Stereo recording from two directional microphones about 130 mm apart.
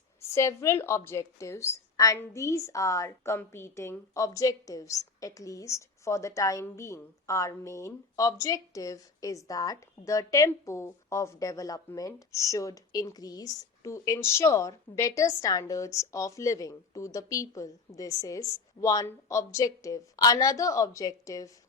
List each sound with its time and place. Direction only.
0.2 s speech: 20° left (ahead or behind)